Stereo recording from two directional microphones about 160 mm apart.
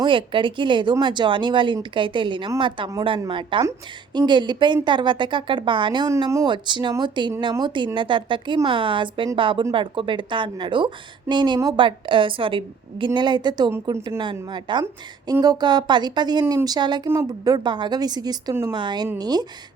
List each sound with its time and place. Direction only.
0.0 s a woman's voice: 30° right (ahead or behind)